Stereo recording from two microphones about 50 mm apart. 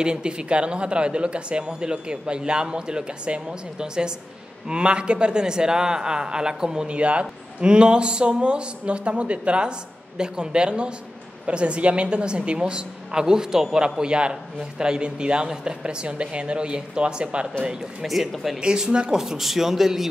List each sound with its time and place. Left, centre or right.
0.0 s a man's voice: centre
18.3 s speech: centre
18.6 s speech: centre